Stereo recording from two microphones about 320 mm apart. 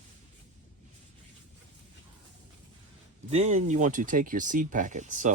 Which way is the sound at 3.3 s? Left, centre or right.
Right.